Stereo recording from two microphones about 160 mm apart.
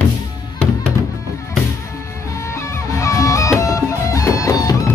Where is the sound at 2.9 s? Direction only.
20° left (ahead or behind).